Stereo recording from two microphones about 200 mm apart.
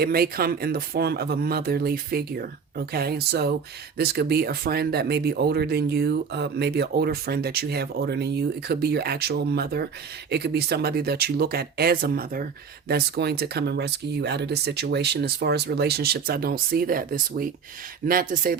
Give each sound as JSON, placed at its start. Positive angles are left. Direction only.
{"t": 0.0, "sound": "speech", "side_deg": -50}